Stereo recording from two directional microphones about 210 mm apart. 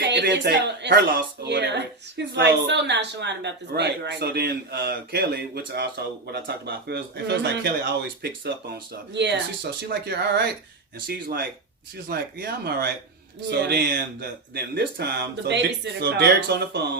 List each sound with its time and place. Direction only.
0.0 s speech: 55° right (ahead or behind)
9.9 s speech: 50° right (ahead or behind)